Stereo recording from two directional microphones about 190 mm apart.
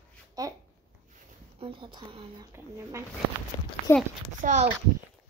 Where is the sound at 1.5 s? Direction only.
30° right (ahead or behind).